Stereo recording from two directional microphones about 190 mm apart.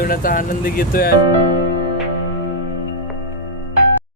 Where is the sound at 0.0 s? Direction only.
45° left (ahead or behind).